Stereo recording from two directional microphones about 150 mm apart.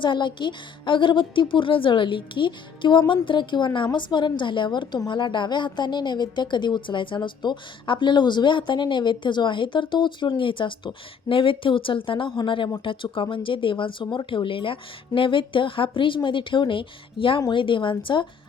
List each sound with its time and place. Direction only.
0.0 s a woman's voice: 30° left (ahead or behind)